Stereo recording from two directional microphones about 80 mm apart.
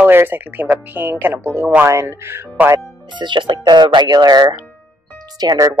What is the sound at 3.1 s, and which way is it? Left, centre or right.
Speech, right.